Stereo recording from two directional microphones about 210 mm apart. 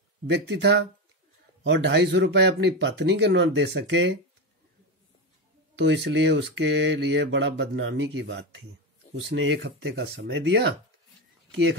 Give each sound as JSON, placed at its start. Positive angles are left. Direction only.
{"t": 0.3, "sound": "speech", "side_deg": -55}
{"t": 5.8, "sound": "speech", "side_deg": -60}